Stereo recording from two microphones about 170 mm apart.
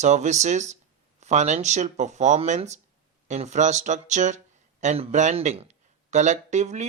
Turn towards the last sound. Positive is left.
turn(degrees=-45)  # may be behind; listen again after turning